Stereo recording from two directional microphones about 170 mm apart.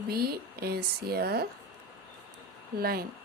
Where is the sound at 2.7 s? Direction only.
60° right (ahead or behind).